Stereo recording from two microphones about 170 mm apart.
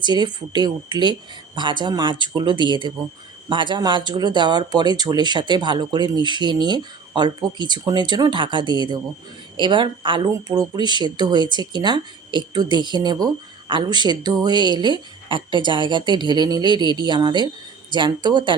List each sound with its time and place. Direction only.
0.0 s speech: 25° right (ahead or behind)